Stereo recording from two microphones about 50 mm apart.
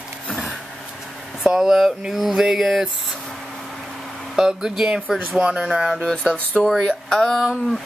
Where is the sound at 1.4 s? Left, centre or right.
Centre.